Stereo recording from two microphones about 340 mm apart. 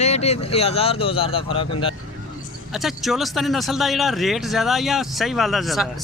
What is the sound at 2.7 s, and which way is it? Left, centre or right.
Speech, centre.